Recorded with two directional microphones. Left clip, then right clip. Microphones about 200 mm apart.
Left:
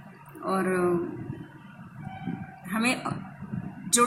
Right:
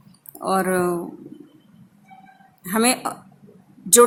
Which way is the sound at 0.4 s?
55° right (ahead or behind).